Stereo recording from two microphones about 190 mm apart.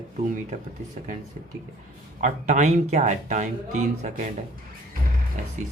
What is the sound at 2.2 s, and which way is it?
Speech, 40° right (ahead or behind).